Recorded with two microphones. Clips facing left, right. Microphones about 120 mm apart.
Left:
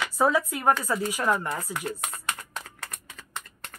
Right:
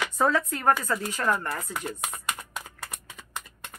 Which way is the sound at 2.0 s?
10° right (ahead or behind).